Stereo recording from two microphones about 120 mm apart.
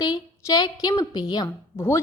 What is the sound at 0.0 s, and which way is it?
A woman's voice, 35° left (ahead or behind).